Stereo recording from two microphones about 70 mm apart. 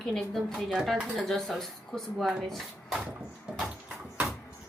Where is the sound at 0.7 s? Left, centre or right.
Centre.